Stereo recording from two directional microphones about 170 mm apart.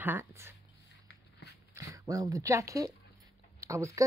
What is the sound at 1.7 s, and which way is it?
Speech, 20° right (ahead or behind).